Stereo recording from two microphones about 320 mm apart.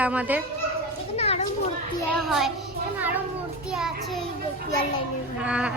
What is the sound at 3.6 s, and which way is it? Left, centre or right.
Child singing, centre.